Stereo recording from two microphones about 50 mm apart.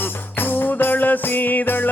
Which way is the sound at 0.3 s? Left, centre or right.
Left.